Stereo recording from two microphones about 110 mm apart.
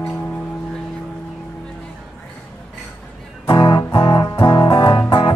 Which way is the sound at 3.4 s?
50° left (ahead or behind).